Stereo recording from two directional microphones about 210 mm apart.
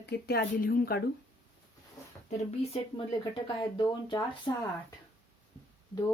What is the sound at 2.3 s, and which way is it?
Speech, 25° left (ahead or behind).